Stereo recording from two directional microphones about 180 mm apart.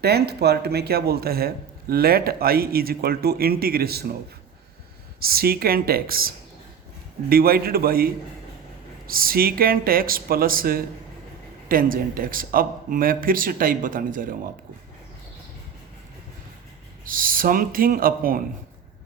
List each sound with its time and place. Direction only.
0.0 s speech: 60° right (ahead or behind)
5.2 s a man's voice: 55° right (ahead or behind)
17.1 s a man's voice: 50° right (ahead or behind)